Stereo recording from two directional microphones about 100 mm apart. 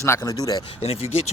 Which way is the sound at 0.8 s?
90° left.